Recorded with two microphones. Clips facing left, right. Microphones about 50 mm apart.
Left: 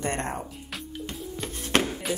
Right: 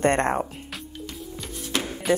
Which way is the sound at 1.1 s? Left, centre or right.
Left.